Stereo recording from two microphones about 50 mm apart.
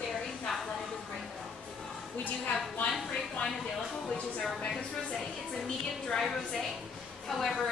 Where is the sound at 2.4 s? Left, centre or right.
Left.